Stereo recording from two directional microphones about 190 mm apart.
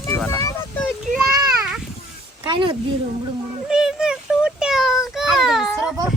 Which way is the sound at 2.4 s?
25° right (ahead or behind).